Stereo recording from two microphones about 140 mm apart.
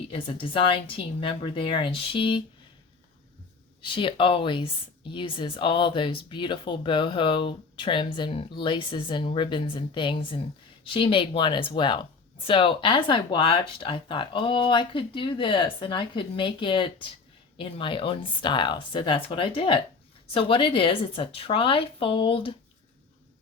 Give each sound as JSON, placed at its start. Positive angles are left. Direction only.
{"t": 0.1, "sound": "speech", "side_deg": 40}
{"t": 3.8, "sound": "speech", "side_deg": 35}